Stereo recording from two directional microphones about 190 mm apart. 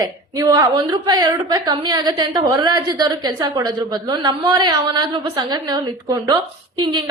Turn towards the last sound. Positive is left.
turn(degrees=-25)  # may be behind; listen again after turning